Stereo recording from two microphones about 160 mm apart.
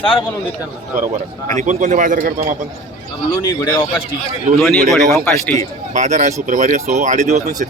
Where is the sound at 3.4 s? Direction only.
25° left (ahead or behind).